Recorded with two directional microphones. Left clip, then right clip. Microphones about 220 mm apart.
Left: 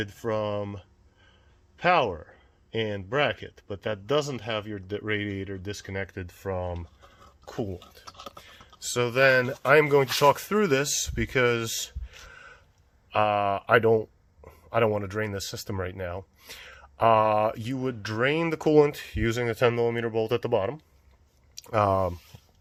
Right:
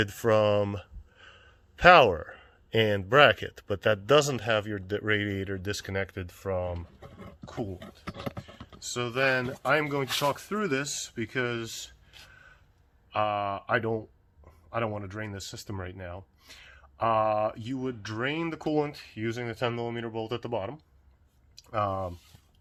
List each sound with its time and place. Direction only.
0.0 s speech: 30° right (ahead or behind)
5.9 s speech: 5° right (ahead or behind)
6.6 s speech: 15° left (ahead or behind)
7.4 s speech: 30° left (ahead or behind)
8.8 s speech: 40° left (ahead or behind)
12.3 s a sound: 45° left (ahead or behind)
13.1 s speech: 40° left (ahead or behind)